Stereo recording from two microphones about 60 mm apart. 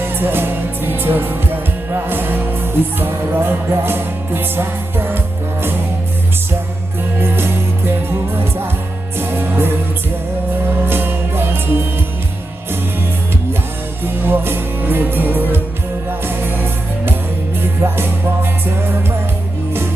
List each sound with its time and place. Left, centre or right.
0.0 s music: right
7.2 s music: right
9.1 s music: right
14.0 s music: right
17.8 s music: right